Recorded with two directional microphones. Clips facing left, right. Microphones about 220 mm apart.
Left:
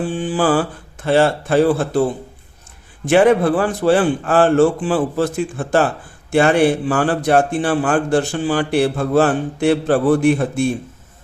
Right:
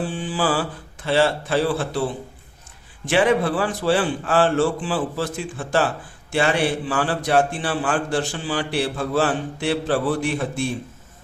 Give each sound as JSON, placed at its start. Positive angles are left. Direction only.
{"t": 0.2, "sound": "mantra", "side_deg": 50}
{"t": 1.0, "sound": "a man's voice", "side_deg": 50}
{"t": 3.1, "sound": "a man's voice", "side_deg": 50}